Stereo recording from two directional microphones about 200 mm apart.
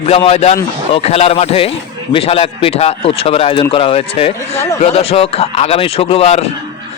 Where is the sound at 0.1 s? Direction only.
30° left (ahead or behind).